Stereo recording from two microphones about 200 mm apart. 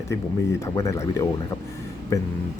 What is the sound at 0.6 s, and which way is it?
Speech, 15° left (ahead or behind).